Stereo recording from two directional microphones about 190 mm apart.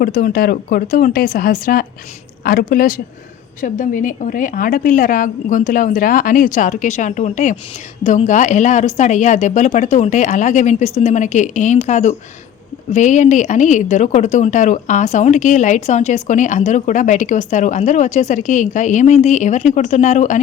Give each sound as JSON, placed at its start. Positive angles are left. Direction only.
{"t": 0.0, "sound": "a woman's voice", "side_deg": 50}